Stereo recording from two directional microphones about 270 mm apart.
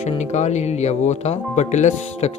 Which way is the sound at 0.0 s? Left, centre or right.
Left.